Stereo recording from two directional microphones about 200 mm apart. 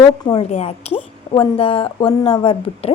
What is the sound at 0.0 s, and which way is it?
A woman's voice, 25° left (ahead or behind).